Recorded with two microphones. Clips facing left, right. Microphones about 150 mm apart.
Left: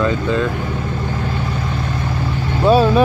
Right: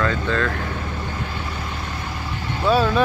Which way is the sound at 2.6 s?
10° left (ahead or behind).